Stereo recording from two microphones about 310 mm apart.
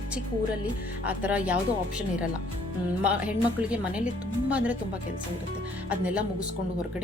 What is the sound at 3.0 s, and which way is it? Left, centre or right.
A woman's voice, centre.